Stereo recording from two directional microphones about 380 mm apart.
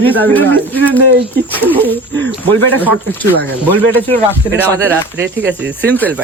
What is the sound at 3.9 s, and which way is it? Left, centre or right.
Speech, centre.